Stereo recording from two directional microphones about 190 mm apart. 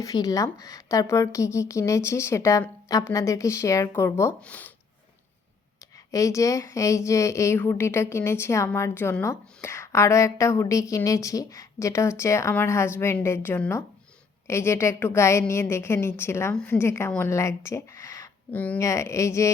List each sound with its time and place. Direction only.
0.0 s a woman's voice: 20° left (ahead or behind)
6.1 s a woman's voice: 15° left (ahead or behind)